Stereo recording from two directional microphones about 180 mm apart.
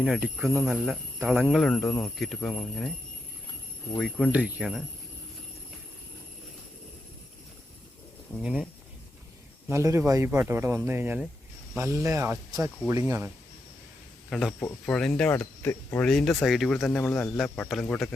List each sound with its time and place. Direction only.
0.0 s speech: centre (ahead or behind)
3.9 s speech: 5° left (ahead or behind)
4.3 s speech: 5° right (ahead or behind)
8.4 s speech: 5° right (ahead or behind)
9.6 s speech: 15° right (ahead or behind)
14.3 s speech: centre (ahead or behind)